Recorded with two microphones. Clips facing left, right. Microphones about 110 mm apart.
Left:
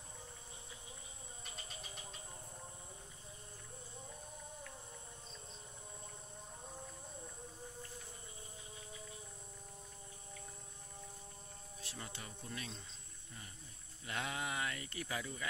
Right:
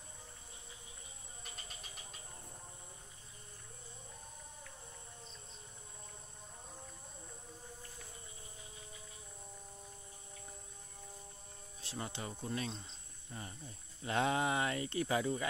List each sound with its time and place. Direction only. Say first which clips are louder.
11.8 s speech: right 7 dB; 30° right (ahead or behind)
14.0 s speech: right 9 dB; 30° right (ahead or behind)